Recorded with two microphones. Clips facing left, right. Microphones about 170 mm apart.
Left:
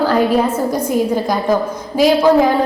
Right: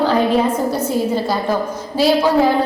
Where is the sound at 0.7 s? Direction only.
15° left (ahead or behind).